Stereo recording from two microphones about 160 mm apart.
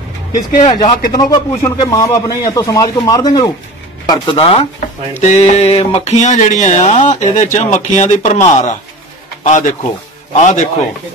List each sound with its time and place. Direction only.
0.3 s speech: 55° left (ahead or behind)
1.1 s a man's voice: 20° left (ahead or behind); by 10.7 s 45° left (ahead or behind)